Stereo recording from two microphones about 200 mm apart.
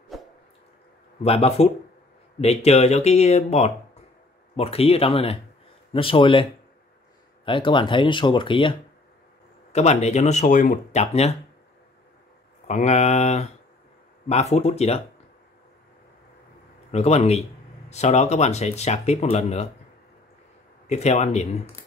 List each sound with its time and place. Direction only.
1.2 s speech: 30° left (ahead or behind)
7.4 s speech: 25° left (ahead or behind)
12.6 s speech: 35° left (ahead or behind)
16.9 s speech: 30° left (ahead or behind)
20.8 s speech: 35° left (ahead or behind)